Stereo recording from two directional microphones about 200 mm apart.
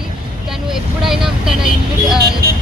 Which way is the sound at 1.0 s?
Centre (ahead or behind).